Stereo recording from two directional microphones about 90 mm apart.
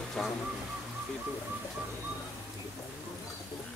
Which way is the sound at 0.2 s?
Centre (ahead or behind).